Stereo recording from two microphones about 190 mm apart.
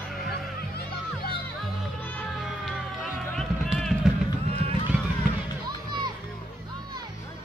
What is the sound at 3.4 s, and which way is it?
Music, centre (ahead or behind).